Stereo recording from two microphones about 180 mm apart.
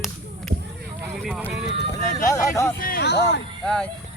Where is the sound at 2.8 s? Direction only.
55° left (ahead or behind).